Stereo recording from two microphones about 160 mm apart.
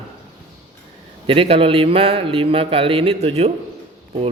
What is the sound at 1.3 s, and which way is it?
A man's voice, 35° right (ahead or behind).